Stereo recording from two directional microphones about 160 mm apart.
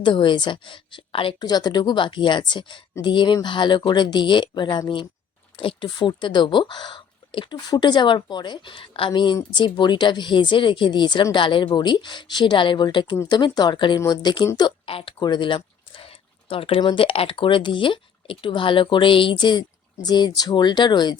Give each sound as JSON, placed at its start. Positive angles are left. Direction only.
{"t": 0.0, "sound": "a woman's voice", "side_deg": 30}